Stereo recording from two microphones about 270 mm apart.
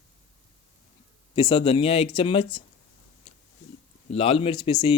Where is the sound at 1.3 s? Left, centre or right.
Centre.